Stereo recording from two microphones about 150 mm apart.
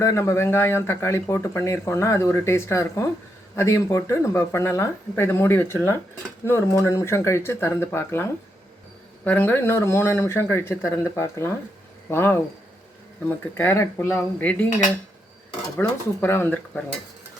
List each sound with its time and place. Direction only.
0.0 s speech: 20° left (ahead or behind)